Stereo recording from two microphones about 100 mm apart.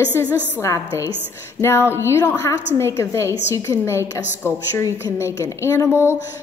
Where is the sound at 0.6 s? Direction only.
30° left (ahead or behind).